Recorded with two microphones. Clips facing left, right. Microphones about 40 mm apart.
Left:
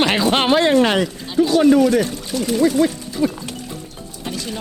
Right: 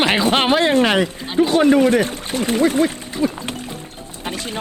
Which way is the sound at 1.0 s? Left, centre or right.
Right.